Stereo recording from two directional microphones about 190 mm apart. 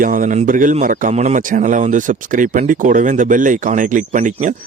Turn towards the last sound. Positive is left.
turn(degrees=-40)  # may be behind; listen again after turning